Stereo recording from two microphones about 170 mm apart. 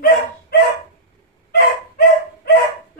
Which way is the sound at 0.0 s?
70° left (ahead or behind).